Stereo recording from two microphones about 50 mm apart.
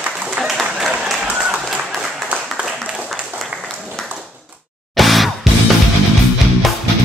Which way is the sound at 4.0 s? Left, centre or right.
Centre.